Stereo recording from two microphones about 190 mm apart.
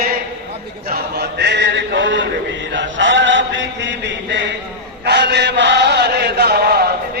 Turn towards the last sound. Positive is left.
turn(degrees=-55)  # may be behind; listen again after turning